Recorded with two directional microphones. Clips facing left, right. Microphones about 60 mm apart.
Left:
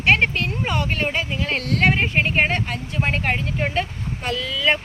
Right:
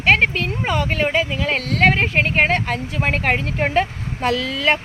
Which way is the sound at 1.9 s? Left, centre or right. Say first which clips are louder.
Right 2 dB; right.